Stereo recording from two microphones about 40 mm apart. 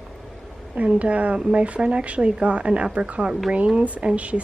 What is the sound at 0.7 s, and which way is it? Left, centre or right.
A woman's voice, right.